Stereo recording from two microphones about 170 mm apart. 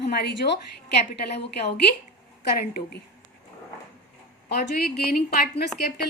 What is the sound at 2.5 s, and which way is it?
Speech, 60° left (ahead or behind).